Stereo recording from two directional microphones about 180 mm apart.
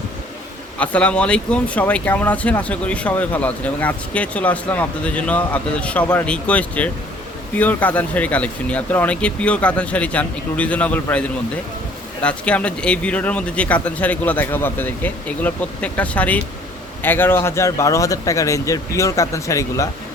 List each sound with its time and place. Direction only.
0.8 s speech: 5° left (ahead or behind)